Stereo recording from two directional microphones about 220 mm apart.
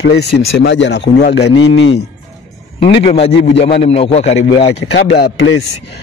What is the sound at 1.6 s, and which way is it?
Speech, 70° left (ahead or behind).